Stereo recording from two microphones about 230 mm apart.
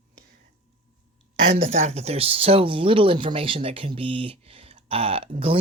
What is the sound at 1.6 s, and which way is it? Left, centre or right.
Speech, right.